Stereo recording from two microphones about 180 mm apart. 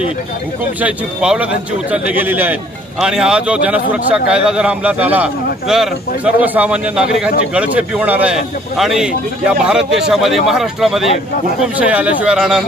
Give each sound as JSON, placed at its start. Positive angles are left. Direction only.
{"t": 0.7, "sound": "a man's voice", "side_deg": -5}